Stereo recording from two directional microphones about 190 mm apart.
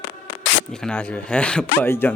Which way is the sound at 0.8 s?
5° left (ahead or behind).